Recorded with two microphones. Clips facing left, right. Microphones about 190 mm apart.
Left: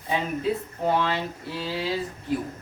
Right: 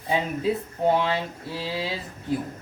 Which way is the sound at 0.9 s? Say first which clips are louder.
Right 2 dB; 25° right (ahead or behind).